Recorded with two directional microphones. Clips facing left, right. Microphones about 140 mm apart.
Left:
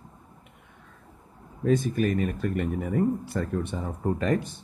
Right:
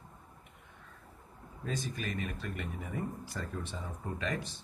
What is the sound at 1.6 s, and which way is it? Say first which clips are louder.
Speech: left 14 dB; 55° left (ahead or behind).